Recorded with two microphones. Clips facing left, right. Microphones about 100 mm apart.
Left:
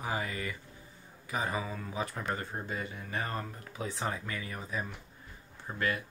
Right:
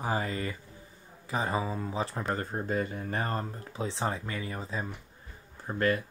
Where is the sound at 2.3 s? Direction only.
40° right (ahead or behind).